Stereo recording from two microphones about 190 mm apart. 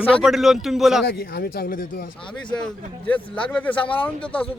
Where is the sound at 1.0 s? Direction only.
60° left (ahead or behind).